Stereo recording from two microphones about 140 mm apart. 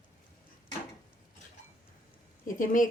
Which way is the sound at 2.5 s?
70° left (ahead or behind).